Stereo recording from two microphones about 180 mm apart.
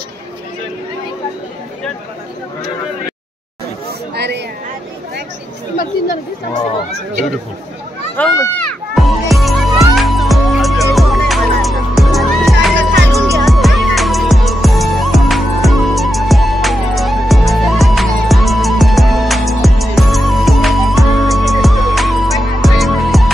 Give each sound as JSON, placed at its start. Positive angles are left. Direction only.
{"t": 4.1, "sound": "a sound", "side_deg": -65}
{"t": 8.2, "sound": "music", "side_deg": 5}
{"t": 12.7, "sound": "music", "side_deg": -90}
{"t": 13.5, "sound": "music", "side_deg": 0}